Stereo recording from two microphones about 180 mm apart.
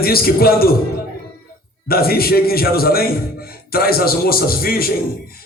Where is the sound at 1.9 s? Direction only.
60° left (ahead or behind).